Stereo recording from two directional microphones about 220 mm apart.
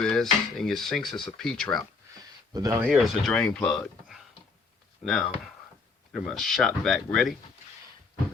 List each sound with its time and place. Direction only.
0.0 s speech: 5° left (ahead or behind)
2.5 s speech: 15° right (ahead or behind)
2.8 s speech: centre (ahead or behind)